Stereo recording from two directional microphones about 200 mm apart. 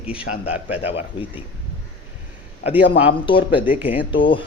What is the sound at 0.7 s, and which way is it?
Speech, 30° left (ahead or behind).